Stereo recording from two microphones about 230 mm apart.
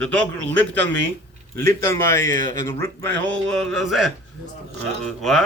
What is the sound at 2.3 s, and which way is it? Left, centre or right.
Speech, right.